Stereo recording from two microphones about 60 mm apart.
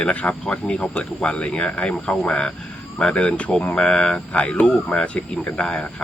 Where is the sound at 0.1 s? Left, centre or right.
Left.